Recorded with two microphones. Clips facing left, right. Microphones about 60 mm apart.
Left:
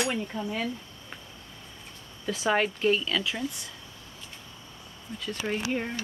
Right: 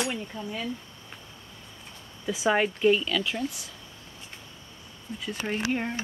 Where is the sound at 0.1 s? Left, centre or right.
Left.